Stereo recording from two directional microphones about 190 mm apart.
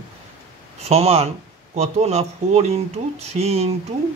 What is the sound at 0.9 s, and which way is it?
Speech, 35° right (ahead or behind).